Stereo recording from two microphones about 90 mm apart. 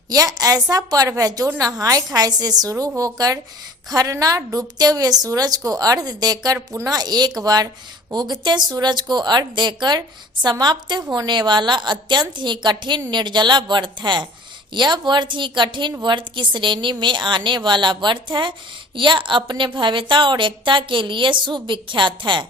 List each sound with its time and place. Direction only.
0.1 s a woman's voice: 45° right (ahead or behind); by 22.4 s 60° right (ahead or behind)